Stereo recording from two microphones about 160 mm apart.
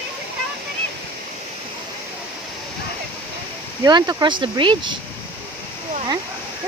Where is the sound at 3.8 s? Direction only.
25° right (ahead or behind).